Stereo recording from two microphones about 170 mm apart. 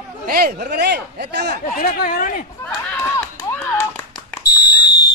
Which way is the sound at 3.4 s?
15° left (ahead or behind).